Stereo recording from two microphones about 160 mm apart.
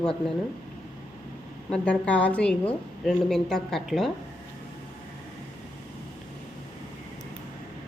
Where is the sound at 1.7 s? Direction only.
5° left (ahead or behind).